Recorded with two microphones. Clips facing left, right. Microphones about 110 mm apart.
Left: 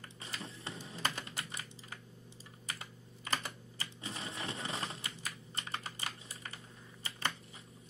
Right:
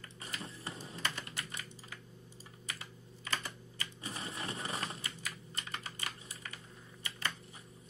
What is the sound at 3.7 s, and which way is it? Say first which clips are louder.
Typewriter: right 2 dB; 30° left (ahead or behind).